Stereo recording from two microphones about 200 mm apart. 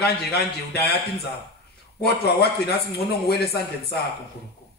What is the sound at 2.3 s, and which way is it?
Speech, 55° left (ahead or behind).